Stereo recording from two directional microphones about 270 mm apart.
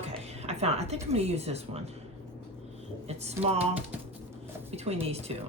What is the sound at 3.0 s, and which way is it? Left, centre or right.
Speech, right.